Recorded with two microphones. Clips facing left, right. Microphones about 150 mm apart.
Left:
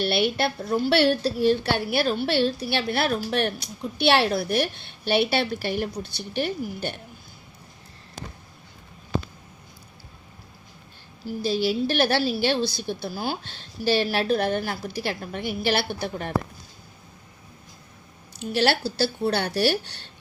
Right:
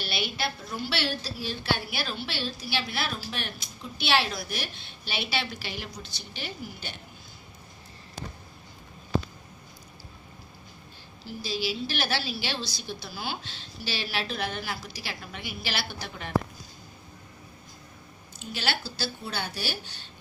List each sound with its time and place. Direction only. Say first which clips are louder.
0.0 s a woman's voice: left 9 dB; 60° left (ahead or behind)
11.3 s a woman's voice: left 8 dB; 55° left (ahead or behind)
18.3 s speech: left 10 dB; 65° left (ahead or behind)